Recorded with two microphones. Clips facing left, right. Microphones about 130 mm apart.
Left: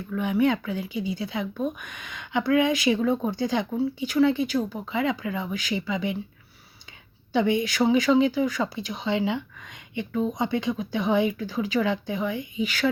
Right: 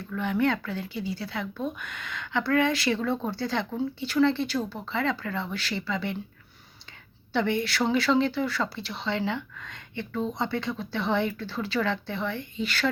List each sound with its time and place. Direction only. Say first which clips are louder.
0.1 s speech: left 3 dB; 15° left (ahead or behind)
7.3 s speech: left 3 dB; 15° left (ahead or behind)